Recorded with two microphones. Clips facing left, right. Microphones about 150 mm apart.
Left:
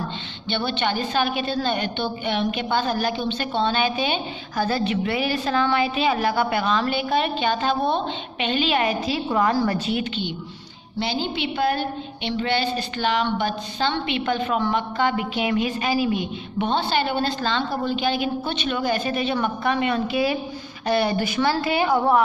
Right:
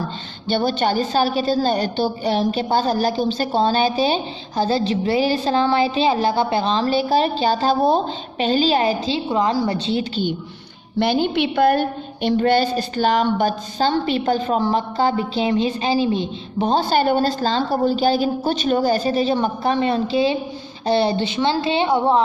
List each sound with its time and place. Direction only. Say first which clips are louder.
0.5 s a woman's voice: right 5 dB; 40° right (ahead or behind)
11.0 s a woman's voice: right 7 dB; 55° right (ahead or behind); by 22.2 s 25° right (ahead or behind)